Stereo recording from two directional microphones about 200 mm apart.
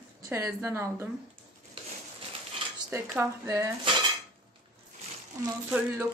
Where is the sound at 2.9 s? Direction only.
15° right (ahead or behind).